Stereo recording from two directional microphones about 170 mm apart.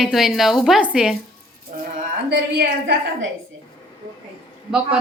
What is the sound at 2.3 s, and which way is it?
Speech, 70° right (ahead or behind).